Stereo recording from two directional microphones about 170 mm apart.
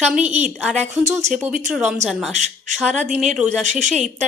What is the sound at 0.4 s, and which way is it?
Speech, centre (ahead or behind).